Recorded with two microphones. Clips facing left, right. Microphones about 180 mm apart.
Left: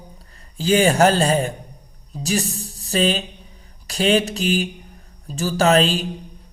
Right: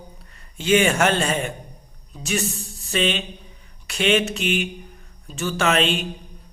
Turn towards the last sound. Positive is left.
turn(degrees=35)  # may be behind; listen again after turning